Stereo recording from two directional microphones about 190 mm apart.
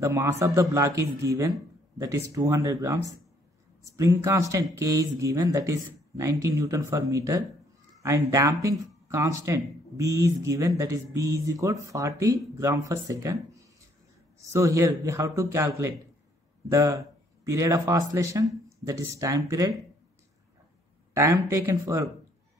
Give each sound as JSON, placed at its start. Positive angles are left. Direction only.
{"t": 0.0, "sound": "speech", "side_deg": -15}
{"t": 21.1, "sound": "speech", "side_deg": -15}